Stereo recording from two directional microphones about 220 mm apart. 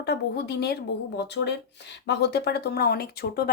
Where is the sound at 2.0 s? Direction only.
50° left (ahead or behind).